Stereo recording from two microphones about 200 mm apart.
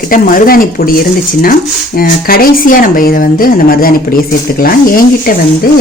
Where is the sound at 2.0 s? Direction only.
45° left (ahead or behind).